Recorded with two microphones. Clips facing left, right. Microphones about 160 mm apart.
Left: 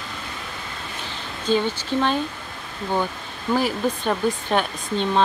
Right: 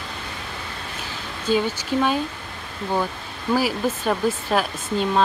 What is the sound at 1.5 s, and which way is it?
Speech, 10° right (ahead or behind).